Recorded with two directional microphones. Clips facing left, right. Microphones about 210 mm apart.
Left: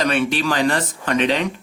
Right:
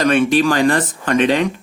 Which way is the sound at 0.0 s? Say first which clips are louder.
Right 6 dB; 50° right (ahead or behind).